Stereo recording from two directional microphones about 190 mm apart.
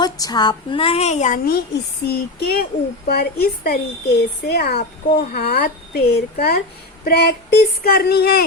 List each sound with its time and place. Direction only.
0.0 s a woman's voice: 20° left (ahead or behind); by 1.4 s 40° left (ahead or behind)
1.5 s speech: 60° left (ahead or behind)